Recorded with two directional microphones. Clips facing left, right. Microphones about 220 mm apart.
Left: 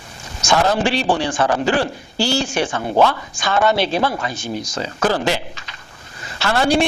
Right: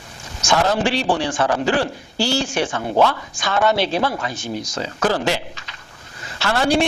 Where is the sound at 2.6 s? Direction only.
25° left (ahead or behind).